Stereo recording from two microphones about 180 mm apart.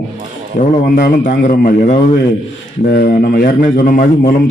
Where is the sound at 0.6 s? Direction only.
50° left (ahead or behind).